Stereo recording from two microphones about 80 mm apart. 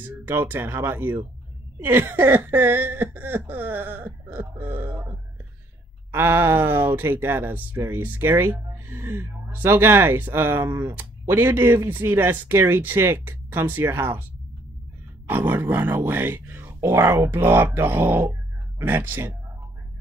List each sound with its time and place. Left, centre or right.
0.0 s speech: right
6.1 s speech: right
15.2 s speech: right